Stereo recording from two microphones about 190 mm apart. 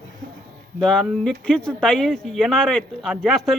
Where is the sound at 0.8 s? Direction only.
5° left (ahead or behind).